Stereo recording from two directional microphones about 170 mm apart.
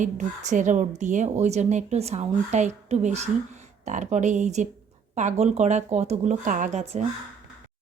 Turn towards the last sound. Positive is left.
turn(degrees=-40)  # may be behind; listen again after turning